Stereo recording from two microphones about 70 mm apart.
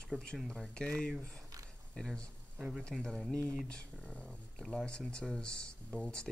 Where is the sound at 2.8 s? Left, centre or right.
Centre.